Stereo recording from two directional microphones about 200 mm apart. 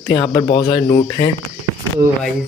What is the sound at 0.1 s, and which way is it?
Speech, 20° left (ahead or behind).